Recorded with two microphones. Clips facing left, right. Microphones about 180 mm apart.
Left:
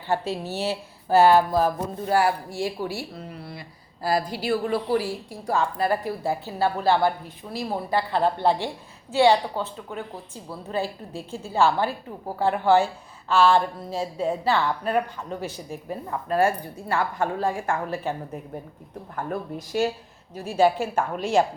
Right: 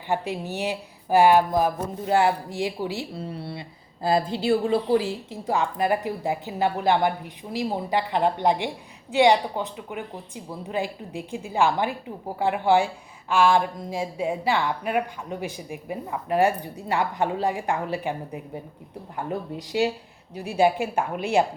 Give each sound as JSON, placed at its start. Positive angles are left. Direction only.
{"t": 0.1, "sound": "a woman's voice", "side_deg": -15}
{"t": 3.2, "sound": "a woman's voice", "side_deg": -30}